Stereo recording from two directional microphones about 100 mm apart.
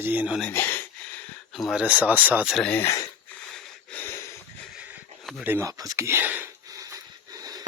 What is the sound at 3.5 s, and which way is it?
Wheeze, 15° left (ahead or behind).